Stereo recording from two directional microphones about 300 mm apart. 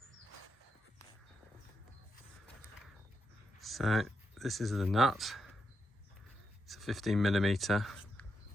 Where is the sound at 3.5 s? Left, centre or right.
Centre.